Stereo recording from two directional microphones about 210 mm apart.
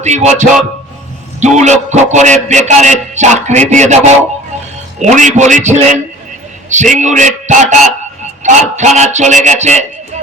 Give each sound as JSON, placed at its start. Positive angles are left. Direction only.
{"t": 0.0, "sound": "a man's voice", "side_deg": -30}
{"t": 5.0, "sound": "a man's voice", "side_deg": -35}